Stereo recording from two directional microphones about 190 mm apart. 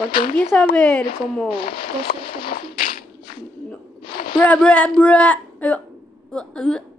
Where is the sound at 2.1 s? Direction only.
40° left (ahead or behind).